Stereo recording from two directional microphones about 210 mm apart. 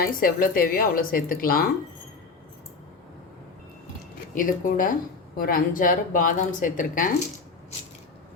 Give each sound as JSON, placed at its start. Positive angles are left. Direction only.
{"t": 0.0, "sound": "a woman's voice", "side_deg": 40}
{"t": 4.4, "sound": "speech", "side_deg": 40}